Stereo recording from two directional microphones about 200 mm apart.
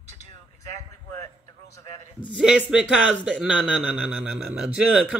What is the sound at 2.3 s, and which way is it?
Speech, 5° right (ahead or behind).